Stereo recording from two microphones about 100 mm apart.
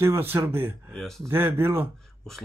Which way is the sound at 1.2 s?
25° right (ahead or behind).